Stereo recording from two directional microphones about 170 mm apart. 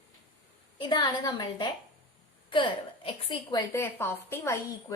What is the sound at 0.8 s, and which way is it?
A woman's voice, 25° left (ahead or behind).